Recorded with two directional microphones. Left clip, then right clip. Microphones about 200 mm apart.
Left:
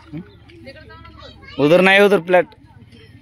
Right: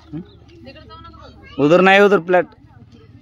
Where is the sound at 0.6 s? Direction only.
10° right (ahead or behind).